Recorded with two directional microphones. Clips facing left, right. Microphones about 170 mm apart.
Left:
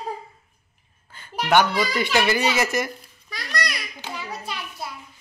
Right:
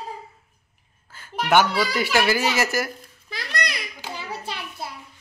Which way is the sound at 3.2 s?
30° right (ahead or behind).